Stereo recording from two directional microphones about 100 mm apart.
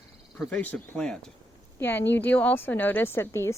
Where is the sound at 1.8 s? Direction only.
20° left (ahead or behind).